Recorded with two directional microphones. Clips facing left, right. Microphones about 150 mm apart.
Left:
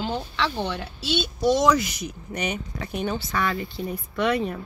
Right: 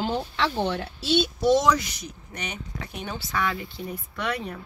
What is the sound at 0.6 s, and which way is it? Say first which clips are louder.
Speech: right 2 dB; 30° right (ahead or behind).